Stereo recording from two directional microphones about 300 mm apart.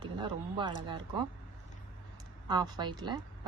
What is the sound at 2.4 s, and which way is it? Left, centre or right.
A woman's voice, centre.